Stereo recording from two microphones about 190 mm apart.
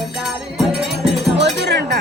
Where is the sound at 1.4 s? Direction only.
60° right (ahead or behind).